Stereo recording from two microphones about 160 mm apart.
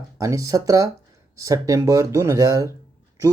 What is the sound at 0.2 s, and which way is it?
A man's voice, 20° right (ahead or behind).